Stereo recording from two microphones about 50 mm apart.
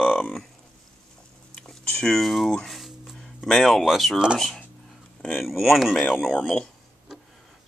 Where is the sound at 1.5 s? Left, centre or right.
Centre.